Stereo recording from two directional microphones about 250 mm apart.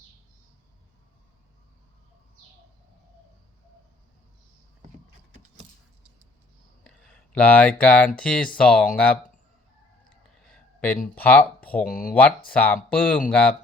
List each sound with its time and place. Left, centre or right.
6.8 s speech: centre
10.3 s a sound: centre
11.1 s speech: centre